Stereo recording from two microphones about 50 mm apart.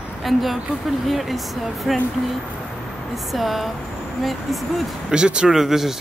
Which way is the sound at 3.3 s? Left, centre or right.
Centre.